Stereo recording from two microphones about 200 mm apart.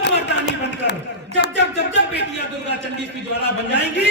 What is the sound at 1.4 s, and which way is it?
Music, 55° left (ahead or behind).